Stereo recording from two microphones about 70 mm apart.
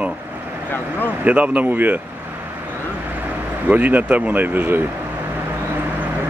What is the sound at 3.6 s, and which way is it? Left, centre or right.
Speech, right.